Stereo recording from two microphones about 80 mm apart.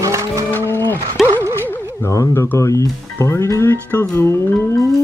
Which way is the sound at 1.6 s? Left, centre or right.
Left.